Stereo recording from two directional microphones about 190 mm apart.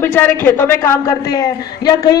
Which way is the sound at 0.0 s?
10° left (ahead or behind).